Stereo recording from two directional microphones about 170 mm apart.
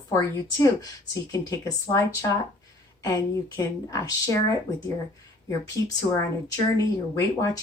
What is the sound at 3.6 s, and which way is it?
Speech, 20° left (ahead or behind).